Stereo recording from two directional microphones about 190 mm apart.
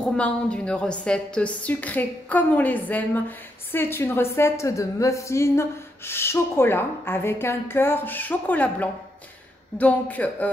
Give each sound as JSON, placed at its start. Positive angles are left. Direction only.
{"t": 0.0, "sound": "a woman's voice", "side_deg": 5}